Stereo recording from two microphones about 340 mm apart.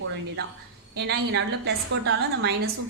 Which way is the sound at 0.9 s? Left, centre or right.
Right.